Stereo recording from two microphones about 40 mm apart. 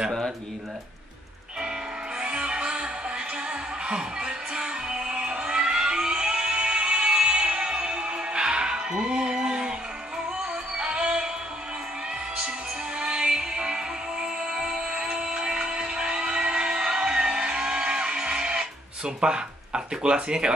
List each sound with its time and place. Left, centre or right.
2.1 s music: right
10.8 s music: right
13.0 s music: centre